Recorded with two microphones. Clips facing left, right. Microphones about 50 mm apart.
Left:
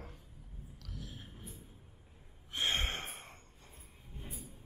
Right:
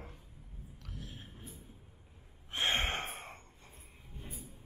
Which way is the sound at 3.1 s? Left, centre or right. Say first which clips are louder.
Right 4 dB; right.